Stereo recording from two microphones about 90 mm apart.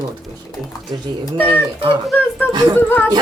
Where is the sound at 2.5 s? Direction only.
55° right (ahead or behind).